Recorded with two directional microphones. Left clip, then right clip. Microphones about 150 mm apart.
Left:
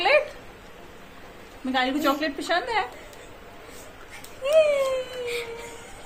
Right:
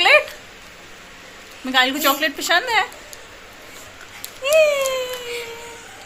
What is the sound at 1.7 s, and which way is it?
A woman's voice, 5° right (ahead or behind).